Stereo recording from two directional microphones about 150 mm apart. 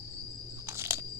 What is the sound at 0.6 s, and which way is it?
Crunch, 20° right (ahead or behind).